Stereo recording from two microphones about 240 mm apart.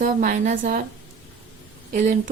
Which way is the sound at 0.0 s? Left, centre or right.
Right.